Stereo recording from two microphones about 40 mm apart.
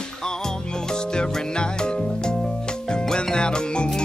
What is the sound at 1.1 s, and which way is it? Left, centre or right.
Music, left.